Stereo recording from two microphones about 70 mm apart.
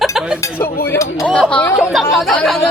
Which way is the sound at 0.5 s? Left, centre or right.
Left.